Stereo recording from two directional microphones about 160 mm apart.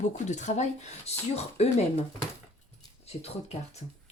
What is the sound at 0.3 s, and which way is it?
Speech, 50° left (ahead or behind).